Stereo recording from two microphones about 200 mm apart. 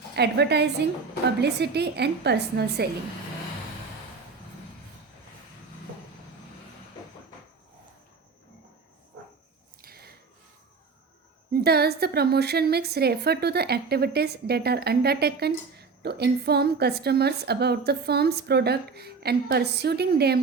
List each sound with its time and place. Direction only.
0.2 s speech: 55° right (ahead or behind)
9.8 s a sound: 50° right (ahead or behind)
11.5 s a woman's voice: 50° right (ahead or behind)